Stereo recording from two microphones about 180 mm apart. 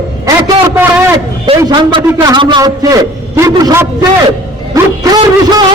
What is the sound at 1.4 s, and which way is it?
A man's voice, 25° right (ahead or behind).